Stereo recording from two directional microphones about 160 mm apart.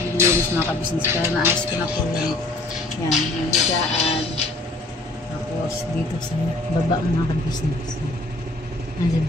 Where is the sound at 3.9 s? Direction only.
40° left (ahead or behind).